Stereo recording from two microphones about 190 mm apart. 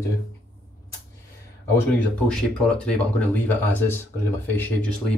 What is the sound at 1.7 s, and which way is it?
Speech, 5° left (ahead or behind).